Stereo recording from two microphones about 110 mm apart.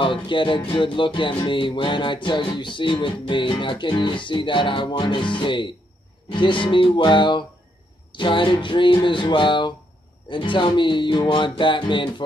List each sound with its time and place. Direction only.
0.0 s music: 50° left (ahead or behind)